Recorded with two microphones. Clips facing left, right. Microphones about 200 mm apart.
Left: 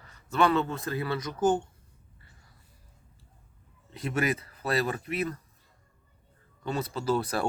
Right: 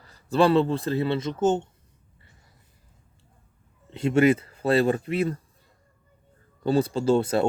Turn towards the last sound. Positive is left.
turn(degrees=-25)  # may be behind; listen again after turning